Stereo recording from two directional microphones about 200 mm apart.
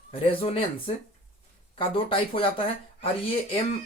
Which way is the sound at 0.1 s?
25° left (ahead or behind).